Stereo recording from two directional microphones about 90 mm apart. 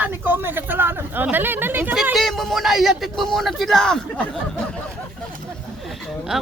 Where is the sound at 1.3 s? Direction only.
25° right (ahead or behind).